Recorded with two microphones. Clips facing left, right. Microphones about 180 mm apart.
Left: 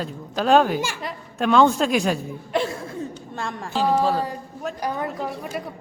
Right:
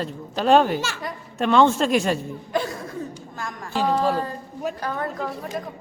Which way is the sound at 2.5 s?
25° left (ahead or behind).